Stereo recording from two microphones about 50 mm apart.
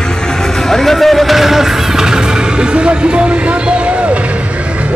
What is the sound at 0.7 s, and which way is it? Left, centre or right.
Music, centre.